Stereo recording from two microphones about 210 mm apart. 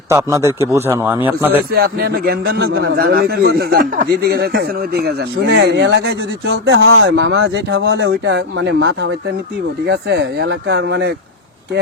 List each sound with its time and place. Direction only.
0.1 s a man's voice: 15° right (ahead or behind)
1.7 s a man's voice: 45° right (ahead or behind)